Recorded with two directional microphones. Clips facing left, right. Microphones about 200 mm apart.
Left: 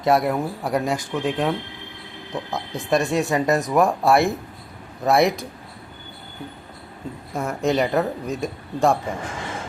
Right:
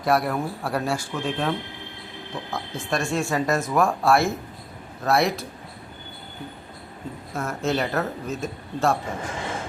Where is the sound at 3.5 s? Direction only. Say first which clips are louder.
Left 2 dB; 15° left (ahead or behind).